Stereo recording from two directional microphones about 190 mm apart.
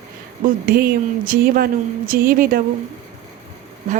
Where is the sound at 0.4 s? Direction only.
50° right (ahead or behind).